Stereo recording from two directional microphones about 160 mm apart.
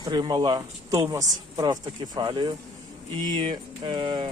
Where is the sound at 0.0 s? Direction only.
25° right (ahead or behind).